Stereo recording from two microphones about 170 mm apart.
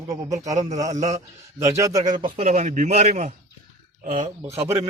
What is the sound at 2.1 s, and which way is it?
A man's voice, 35° right (ahead or behind).